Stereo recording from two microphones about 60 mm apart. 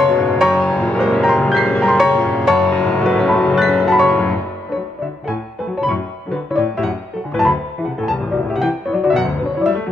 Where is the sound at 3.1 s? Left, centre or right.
Centre.